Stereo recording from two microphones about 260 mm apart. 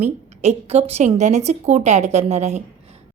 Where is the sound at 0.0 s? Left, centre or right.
Right.